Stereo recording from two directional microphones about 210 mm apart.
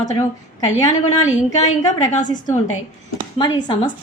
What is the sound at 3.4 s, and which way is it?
Speech, 20° left (ahead or behind).